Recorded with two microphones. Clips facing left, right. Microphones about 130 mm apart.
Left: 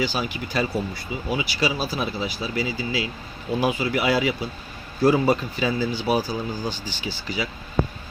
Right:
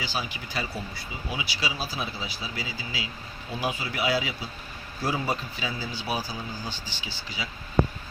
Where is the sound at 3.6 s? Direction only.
65° left (ahead or behind).